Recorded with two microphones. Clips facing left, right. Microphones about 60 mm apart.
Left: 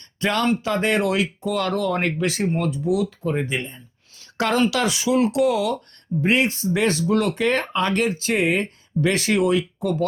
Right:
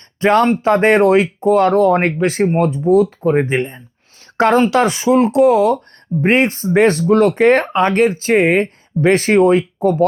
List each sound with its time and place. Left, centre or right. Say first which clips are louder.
0.2 s speech: right 9 dB; right